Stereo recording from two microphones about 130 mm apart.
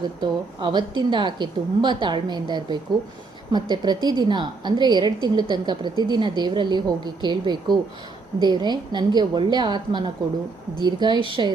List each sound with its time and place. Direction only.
0.2 s a woman's voice: 35° right (ahead or behind)